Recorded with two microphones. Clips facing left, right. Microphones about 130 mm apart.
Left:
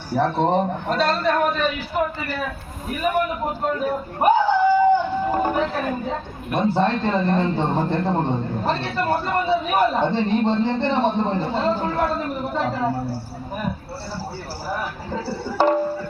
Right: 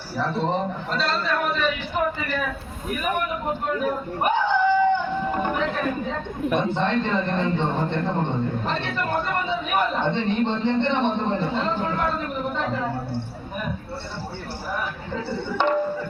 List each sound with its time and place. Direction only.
0.1 s a man's voice: 55° left (ahead or behind)
3.7 s a sound: 35° left (ahead or behind)
6.7 s a man's voice: 35° left (ahead or behind)
14.7 s speech: 35° left (ahead or behind)